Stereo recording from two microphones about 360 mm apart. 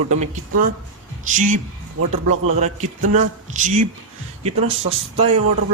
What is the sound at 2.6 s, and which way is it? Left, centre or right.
A man's voice, centre.